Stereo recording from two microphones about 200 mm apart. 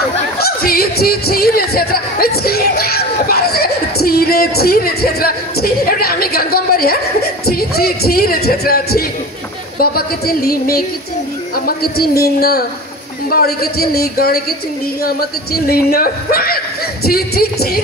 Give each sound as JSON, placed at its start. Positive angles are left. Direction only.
{"t": 0.4, "sound": "music", "side_deg": 50}
{"t": 9.8, "sound": "speech", "side_deg": 50}